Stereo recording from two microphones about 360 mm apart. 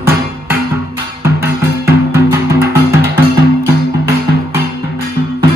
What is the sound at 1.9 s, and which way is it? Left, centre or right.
Music, centre.